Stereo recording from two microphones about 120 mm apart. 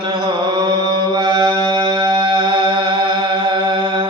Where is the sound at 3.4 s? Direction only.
45° right (ahead or behind).